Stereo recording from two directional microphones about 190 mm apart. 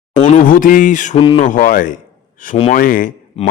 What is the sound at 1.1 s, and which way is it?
Speech, 30° left (ahead or behind).